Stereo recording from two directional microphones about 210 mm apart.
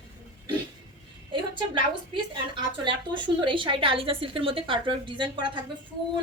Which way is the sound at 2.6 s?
20° right (ahead or behind).